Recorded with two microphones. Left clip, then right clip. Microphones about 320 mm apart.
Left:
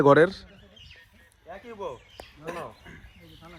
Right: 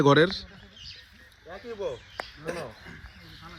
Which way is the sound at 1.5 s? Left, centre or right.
Left.